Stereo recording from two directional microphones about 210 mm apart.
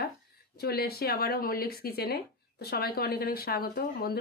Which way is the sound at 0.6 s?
50° left (ahead or behind).